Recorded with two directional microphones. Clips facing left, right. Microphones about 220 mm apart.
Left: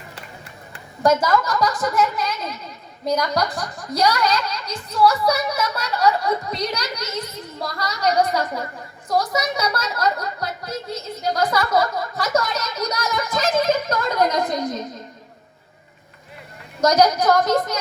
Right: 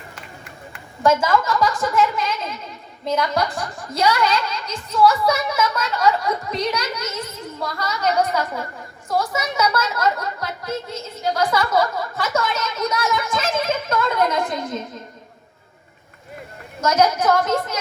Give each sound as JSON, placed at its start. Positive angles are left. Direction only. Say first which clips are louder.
{"t": 1.0, "sound": "a woman's voice", "louder": "even", "side_deg": 40}
{"t": 16.8, "sound": "a woman's voice", "louder": "left 2 dB", "side_deg": 35}